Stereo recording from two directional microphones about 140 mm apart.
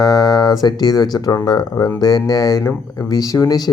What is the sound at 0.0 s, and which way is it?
Speech, 25° left (ahead or behind).